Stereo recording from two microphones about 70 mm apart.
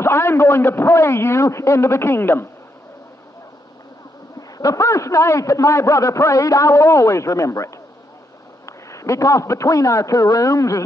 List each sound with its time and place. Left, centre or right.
0.0 s a man's voice: left
4.4 s a man's voice: left